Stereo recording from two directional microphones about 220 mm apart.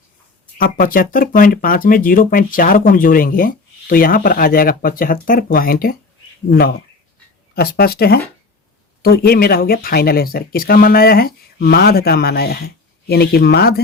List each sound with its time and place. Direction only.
0.6 s speech: 40° left (ahead or behind)